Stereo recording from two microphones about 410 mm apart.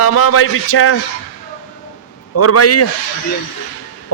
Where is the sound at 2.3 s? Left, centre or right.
Left.